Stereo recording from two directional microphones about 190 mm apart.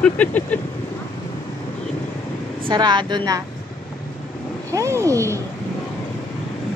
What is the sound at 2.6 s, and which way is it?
Speech, 20° right (ahead or behind).